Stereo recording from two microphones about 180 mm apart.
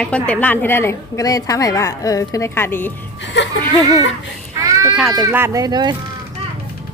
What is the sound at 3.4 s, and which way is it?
Speech, 75° left (ahead or behind).